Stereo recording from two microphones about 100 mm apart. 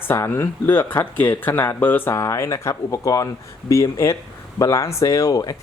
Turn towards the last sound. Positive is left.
turn(degrees=40)  # may be behind; listen again after turning